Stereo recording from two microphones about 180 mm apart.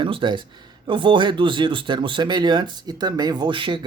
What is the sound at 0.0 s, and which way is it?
Speech, 25° right (ahead or behind).